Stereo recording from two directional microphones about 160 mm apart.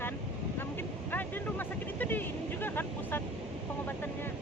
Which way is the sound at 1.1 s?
10° left (ahead or behind).